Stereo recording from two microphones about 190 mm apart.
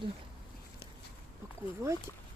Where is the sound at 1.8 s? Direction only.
15° right (ahead or behind).